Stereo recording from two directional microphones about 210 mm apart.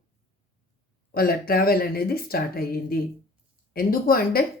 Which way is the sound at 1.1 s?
45° left (ahead or behind).